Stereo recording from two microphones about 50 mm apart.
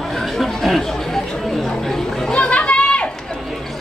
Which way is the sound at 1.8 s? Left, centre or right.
Centre.